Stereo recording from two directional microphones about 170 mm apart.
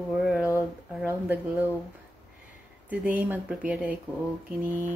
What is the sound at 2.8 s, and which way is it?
Speech, 10° right (ahead or behind).